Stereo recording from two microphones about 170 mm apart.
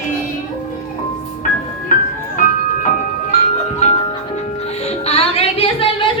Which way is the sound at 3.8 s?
40° left (ahead or behind).